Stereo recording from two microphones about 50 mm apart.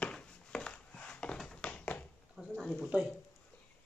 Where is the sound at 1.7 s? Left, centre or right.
Left.